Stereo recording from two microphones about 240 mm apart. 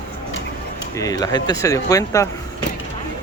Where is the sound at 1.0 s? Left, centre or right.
Centre.